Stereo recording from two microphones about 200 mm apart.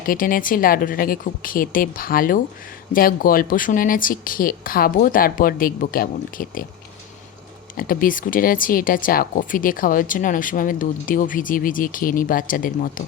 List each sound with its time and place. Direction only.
0.0 s speech: 45° left (ahead or behind)
7.8 s speech: 45° left (ahead or behind)